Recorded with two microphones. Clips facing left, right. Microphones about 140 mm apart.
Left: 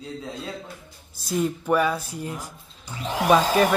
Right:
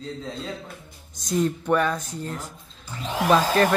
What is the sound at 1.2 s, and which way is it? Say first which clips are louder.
Speech: right 1 dB; 5° left (ahead or behind).